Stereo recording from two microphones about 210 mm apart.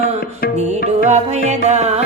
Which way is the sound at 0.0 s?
45° left (ahead or behind).